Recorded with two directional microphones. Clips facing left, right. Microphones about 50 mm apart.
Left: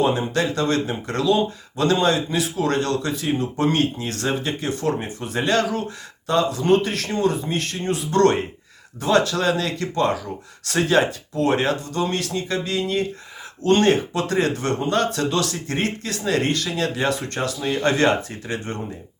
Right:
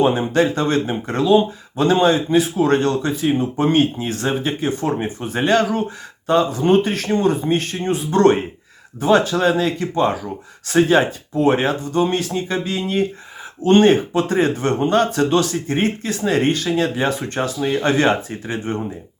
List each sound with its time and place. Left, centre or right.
0.0 s speech: right